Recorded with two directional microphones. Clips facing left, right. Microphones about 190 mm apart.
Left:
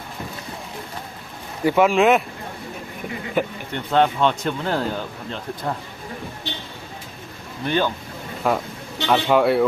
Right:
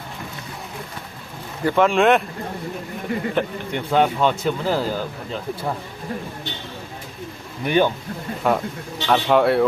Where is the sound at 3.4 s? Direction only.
5° left (ahead or behind).